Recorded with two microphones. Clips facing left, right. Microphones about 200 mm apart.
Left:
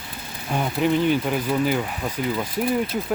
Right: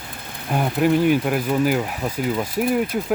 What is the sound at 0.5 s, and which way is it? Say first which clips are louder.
Speech: right 3 dB; 5° right (ahead or behind).